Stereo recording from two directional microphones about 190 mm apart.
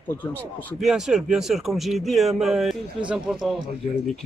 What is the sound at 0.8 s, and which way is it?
Speech, 5° right (ahead or behind).